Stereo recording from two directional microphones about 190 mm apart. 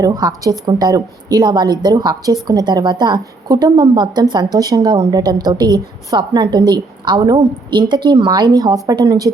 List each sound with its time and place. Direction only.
0.0 s a woman's voice: 20° right (ahead or behind)